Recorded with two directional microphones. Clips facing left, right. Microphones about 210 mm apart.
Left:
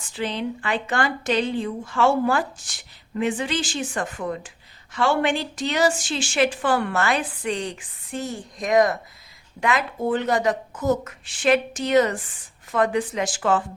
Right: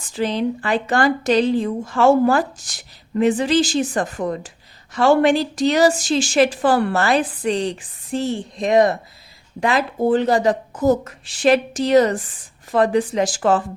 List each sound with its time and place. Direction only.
0.1 s speech: 40° right (ahead or behind)